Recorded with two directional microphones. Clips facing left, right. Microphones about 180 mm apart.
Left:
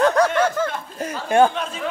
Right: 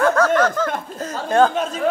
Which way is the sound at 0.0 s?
15° left (ahead or behind).